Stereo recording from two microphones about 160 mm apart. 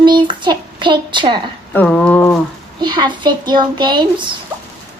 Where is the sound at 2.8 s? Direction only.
25° right (ahead or behind).